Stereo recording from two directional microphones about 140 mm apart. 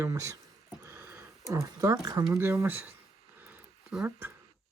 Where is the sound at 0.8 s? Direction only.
15° right (ahead or behind).